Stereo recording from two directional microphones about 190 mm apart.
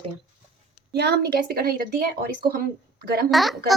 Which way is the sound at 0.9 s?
60° right (ahead or behind).